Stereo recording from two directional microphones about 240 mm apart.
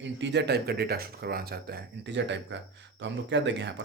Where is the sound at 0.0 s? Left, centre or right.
Right.